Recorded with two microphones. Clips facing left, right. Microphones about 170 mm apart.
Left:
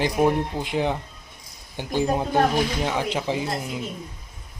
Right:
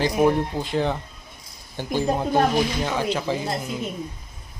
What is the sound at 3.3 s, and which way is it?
Speech, 20° left (ahead or behind).